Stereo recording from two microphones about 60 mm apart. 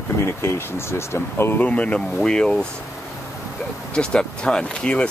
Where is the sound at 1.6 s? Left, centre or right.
Left.